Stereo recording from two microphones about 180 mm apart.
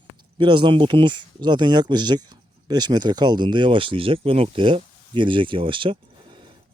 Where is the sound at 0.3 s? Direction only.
25° right (ahead or behind).